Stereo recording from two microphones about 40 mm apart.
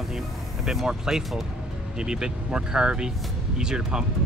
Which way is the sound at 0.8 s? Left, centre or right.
Centre.